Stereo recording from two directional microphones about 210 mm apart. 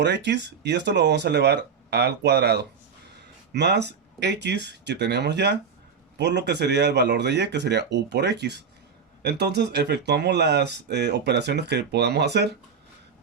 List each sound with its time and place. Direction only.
0.0 s speech: 55° right (ahead or behind)